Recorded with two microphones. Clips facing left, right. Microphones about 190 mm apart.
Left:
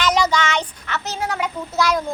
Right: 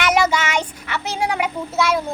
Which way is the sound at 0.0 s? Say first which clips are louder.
Right 1 dB; 10° right (ahead or behind).